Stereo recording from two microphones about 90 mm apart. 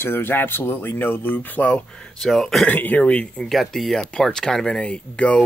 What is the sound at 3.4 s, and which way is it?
Speech, centre (ahead or behind).